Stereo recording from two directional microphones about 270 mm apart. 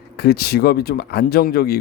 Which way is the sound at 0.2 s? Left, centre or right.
Left.